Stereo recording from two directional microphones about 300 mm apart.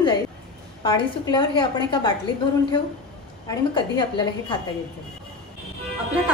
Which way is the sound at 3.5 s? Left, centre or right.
Centre.